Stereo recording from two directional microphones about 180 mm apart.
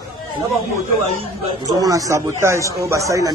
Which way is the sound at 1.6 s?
20° right (ahead or behind).